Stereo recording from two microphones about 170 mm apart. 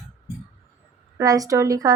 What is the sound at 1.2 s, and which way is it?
Speech, 20° right (ahead or behind).